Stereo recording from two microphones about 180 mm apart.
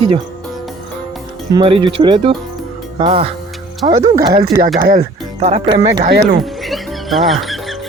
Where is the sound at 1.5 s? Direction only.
30° right (ahead or behind).